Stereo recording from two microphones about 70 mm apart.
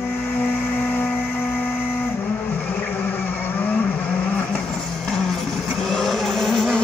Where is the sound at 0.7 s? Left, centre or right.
Left.